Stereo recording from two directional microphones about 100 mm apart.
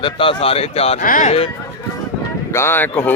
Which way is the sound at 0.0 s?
60° left (ahead or behind).